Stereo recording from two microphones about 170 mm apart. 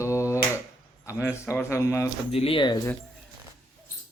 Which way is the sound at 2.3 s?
30° left (ahead or behind).